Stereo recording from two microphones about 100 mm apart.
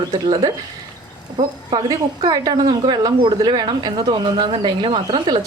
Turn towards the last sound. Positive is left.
turn(degrees=-55)  # may be behind; listen again after turning